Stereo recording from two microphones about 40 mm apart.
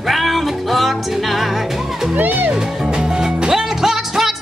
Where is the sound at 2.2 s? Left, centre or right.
Right.